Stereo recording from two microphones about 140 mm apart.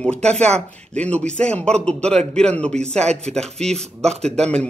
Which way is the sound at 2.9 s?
50° right (ahead or behind).